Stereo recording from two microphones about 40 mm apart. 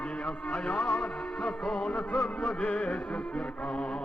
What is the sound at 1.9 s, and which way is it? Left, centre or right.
Music, left.